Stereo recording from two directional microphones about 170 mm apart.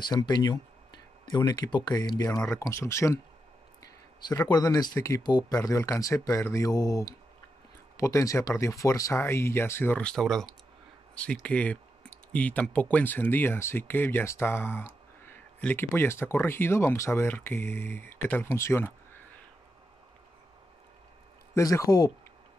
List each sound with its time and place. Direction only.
0.0 s speech: 25° left (ahead or behind)
21.5 s speech: 20° left (ahead or behind)